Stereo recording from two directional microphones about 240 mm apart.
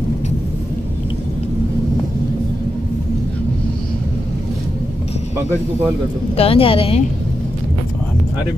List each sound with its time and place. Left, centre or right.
6.3 s a woman's voice: left